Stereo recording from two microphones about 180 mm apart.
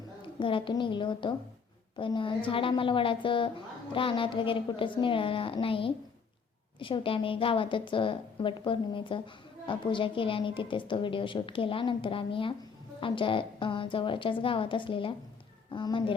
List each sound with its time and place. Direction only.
0.3 s a woman's voice: 25° left (ahead or behind)